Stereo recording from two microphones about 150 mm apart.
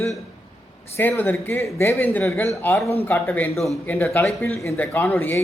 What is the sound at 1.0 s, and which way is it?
Speech, 15° left (ahead or behind).